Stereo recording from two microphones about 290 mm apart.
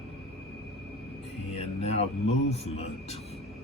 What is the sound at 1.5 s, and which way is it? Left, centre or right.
Speech, left.